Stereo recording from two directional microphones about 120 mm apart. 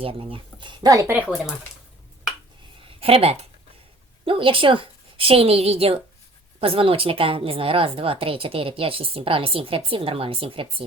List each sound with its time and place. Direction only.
0.0 s speech: 50° right (ahead or behind); by 1.1 s 30° right (ahead or behind)
3.0 s a woman's voice: 55° right (ahead or behind)